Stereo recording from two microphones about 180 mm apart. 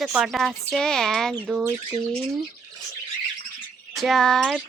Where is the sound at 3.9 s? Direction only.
Centre (ahead or behind).